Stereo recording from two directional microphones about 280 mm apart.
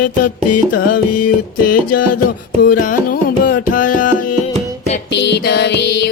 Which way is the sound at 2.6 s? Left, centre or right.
Left.